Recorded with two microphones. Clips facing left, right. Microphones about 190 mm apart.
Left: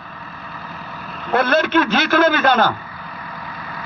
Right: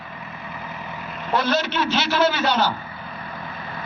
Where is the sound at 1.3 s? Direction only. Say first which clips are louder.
Left 6 dB; 55° left (ahead or behind).